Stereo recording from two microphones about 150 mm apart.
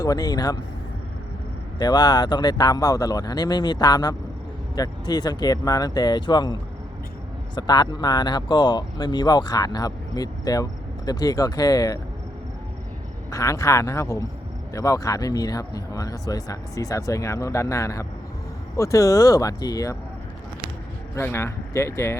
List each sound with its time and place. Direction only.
0.0 s speech: 25° left (ahead or behind)
1.8 s speech: 30° left (ahead or behind)
13.3 s speech: 20° left (ahead or behind)
21.2 s speech: 15° left (ahead or behind)